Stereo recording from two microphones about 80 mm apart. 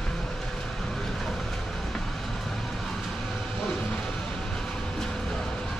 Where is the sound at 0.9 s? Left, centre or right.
Centre.